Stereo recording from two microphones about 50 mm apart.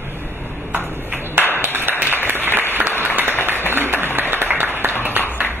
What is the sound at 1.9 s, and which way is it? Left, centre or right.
Applause, right.